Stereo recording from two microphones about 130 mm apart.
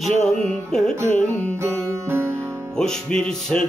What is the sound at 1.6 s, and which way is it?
Music, 20° right (ahead or behind).